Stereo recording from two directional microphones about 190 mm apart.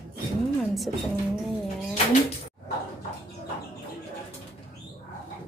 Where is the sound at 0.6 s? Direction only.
Centre (ahead or behind).